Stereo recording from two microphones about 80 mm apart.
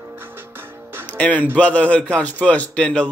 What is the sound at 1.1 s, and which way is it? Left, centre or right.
Speech, centre.